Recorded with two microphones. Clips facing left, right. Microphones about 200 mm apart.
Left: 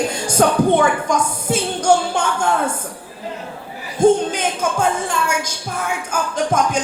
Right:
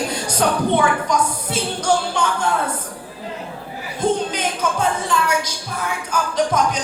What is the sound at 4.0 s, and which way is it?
Speech, 50° left (ahead or behind).